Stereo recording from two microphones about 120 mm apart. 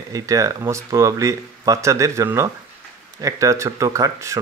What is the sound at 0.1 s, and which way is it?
Speech, 25° right (ahead or behind).